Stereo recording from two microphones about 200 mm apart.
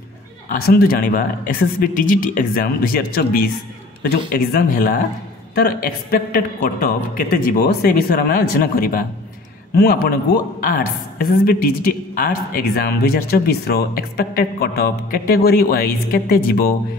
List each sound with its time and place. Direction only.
0.5 s a woman's voice: 50° left (ahead or behind)